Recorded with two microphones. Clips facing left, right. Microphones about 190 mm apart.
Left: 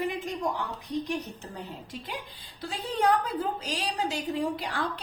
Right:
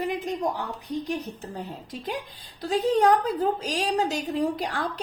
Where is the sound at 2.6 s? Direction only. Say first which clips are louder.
Right 7 dB; 40° right (ahead or behind).